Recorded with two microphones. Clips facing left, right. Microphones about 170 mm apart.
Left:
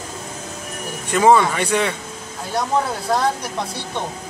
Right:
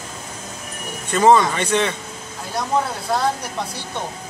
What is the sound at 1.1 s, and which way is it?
Speech, 10° left (ahead or behind).